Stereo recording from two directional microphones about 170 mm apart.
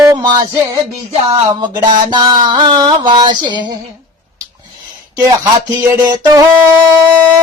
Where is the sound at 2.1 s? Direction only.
25° right (ahead or behind).